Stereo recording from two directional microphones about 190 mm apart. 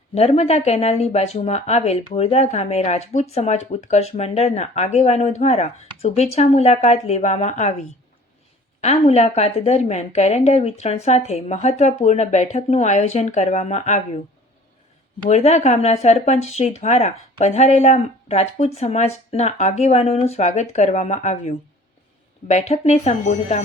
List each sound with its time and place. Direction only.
0.1 s speech: 35° left (ahead or behind)
8.8 s speech: 35° left (ahead or behind)
15.3 s speech: 35° left (ahead or behind)